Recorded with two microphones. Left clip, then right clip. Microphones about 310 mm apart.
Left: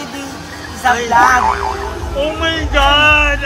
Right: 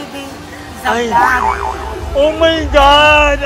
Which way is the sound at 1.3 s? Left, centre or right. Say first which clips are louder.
Left 1 dB; centre.